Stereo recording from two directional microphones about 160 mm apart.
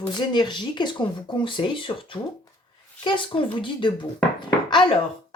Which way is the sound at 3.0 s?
35° left (ahead or behind).